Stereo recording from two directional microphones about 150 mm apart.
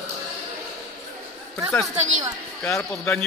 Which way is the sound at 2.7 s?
20° left (ahead or behind).